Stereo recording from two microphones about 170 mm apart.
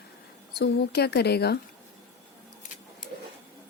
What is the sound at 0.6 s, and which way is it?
Speech, 70° left (ahead or behind).